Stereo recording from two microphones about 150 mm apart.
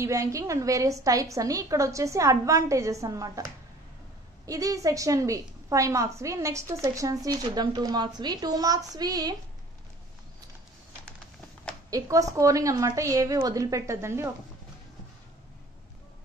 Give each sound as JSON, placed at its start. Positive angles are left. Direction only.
{"t": 0.0, "sound": "a woman's voice", "side_deg": -20}
{"t": 11.9, "sound": "a woman's voice", "side_deg": -20}